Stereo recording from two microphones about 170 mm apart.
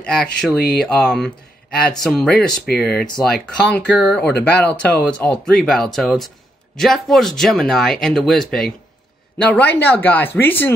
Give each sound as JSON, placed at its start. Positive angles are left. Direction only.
{"t": 0.0, "sound": "speech", "side_deg": 5}
{"t": 9.8, "sound": "speech", "side_deg": 10}